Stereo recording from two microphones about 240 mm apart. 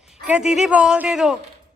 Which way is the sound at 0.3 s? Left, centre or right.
Centre.